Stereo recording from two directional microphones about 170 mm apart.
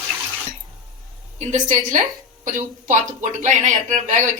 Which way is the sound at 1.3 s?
45° right (ahead or behind).